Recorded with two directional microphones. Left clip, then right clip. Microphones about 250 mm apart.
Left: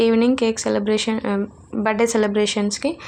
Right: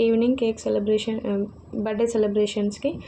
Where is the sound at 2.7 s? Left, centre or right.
Left.